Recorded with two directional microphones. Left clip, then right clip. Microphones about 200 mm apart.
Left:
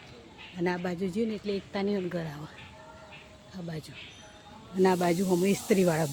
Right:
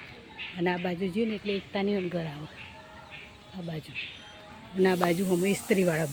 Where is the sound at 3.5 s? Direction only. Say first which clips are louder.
Right 1 dB; 10° right (ahead or behind).